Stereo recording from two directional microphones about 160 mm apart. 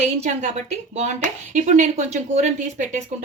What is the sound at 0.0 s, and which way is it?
A woman's voice, 45° right (ahead or behind).